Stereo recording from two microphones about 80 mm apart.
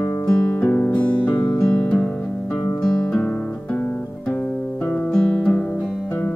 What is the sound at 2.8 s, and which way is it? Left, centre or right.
Guitar, centre.